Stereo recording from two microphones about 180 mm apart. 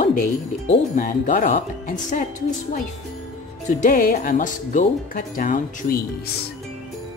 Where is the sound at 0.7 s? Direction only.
45° left (ahead or behind).